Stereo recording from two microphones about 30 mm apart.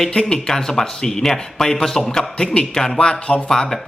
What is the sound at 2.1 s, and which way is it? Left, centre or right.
Speech, left.